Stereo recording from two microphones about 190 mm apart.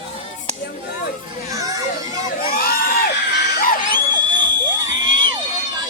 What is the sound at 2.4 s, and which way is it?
Crowd, 50° left (ahead or behind).